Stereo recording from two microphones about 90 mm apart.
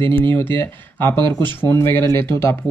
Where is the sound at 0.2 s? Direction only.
25° left (ahead or behind).